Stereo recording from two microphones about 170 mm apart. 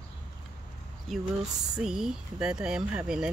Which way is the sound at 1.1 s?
Centre (ahead or behind).